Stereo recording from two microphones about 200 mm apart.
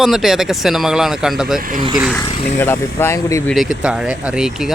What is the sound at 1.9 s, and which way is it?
Speech, centre (ahead or behind).